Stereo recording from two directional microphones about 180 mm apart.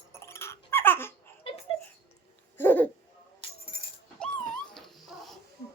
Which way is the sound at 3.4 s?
30° left (ahead or behind).